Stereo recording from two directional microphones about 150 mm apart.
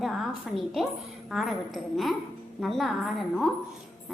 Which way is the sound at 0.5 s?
Centre (ahead or behind).